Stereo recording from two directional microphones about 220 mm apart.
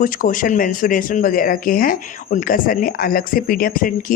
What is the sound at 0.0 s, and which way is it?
Speech, 40° left (ahead or behind).